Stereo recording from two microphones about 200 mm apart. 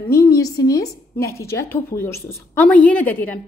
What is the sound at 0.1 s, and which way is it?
A woman's voice, 15° left (ahead or behind).